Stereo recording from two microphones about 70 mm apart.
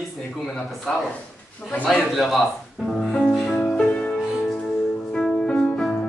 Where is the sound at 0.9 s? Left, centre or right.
Centre.